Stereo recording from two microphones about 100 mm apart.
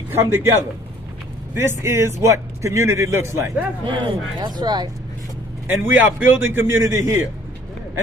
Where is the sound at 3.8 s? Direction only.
55° right (ahead or behind).